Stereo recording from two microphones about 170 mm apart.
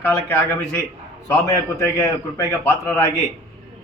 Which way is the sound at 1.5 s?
15° left (ahead or behind).